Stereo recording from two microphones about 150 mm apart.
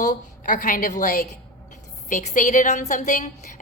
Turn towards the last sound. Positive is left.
turn(degrees=60)  # may be behind; listen again after turning